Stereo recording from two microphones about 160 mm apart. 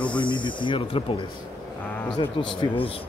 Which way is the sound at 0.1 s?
30° left (ahead or behind).